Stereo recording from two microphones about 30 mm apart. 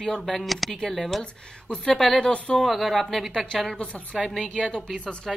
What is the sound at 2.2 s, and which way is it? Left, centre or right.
Speech, left.